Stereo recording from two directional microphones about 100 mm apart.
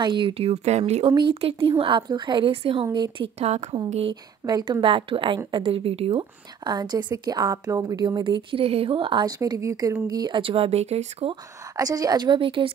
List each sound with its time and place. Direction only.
0.0 s speech: 55° right (ahead or behind); by 1.1 s 90° right
1.3 s speech: 70° right (ahead or behind); by 2.5 s 50° right (ahead or behind)
2.5 s speech: 70° right (ahead or behind)
2.8 s a woman's voice: 50° right (ahead or behind); by 6.2 s 75° right (ahead or behind)
6.6 s a woman's voice: 45° right (ahead or behind); by 9.2 s 60° right (ahead or behind)
9.2 s speech: 40° right (ahead or behind)
10.0 s a woman's voice: 45° right (ahead or behind)
10.4 s speech: 70° right (ahead or behind); by 11.3 s 90° right
11.7 s speech: 40° right (ahead or behind)
12.4 s speech: 60° right (ahead or behind)